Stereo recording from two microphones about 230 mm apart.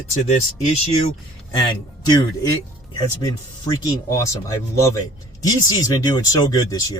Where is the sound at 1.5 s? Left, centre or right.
Centre.